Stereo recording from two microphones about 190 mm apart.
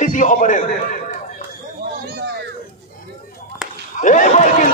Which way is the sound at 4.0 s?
40° left (ahead or behind).